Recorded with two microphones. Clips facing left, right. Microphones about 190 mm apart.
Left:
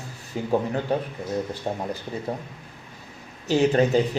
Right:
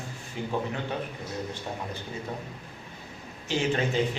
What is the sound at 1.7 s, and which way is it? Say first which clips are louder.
Speech: left 7 dB; 40° left (ahead or behind).